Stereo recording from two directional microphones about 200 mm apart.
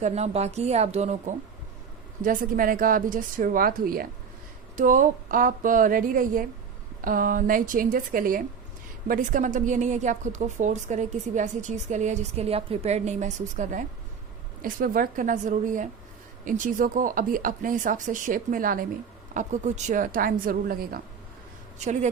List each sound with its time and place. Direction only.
0.0 s a woman's voice: 35° right (ahead or behind)
21.8 s a woman's voice: 35° right (ahead or behind)